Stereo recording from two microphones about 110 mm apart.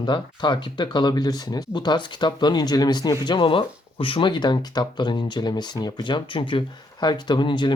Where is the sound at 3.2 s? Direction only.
50° left (ahead or behind).